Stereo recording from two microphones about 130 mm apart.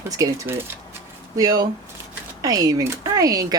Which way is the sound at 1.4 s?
25° right (ahead or behind).